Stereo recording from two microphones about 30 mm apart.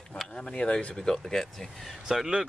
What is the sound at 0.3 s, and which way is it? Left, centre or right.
Speech, left.